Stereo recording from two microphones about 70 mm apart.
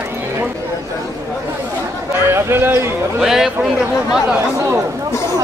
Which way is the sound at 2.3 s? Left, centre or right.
Right.